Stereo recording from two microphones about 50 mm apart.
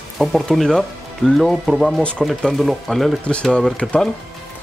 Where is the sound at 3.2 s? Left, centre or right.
Left.